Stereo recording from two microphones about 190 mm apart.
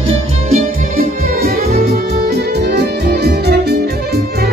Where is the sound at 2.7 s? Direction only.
60° right (ahead or behind).